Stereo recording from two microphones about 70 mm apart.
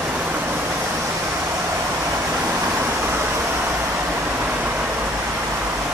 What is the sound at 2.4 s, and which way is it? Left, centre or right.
Vehicle, right.